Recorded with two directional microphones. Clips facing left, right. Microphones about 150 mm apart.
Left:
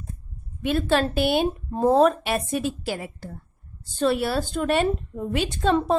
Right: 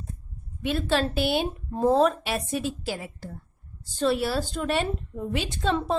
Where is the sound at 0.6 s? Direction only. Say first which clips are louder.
Left 3 dB; 50° left (ahead or behind).